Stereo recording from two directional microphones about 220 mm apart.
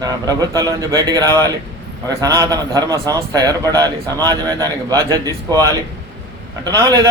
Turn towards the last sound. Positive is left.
turn(degrees=-15)  # may be behind; listen again after turning